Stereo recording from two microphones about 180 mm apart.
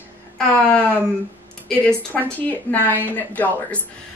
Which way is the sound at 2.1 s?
10° left (ahead or behind).